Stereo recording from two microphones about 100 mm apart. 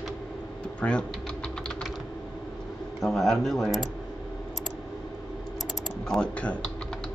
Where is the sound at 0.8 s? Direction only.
15° left (ahead or behind).